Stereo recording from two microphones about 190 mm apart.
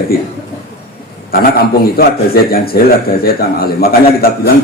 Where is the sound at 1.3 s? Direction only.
55° left (ahead or behind).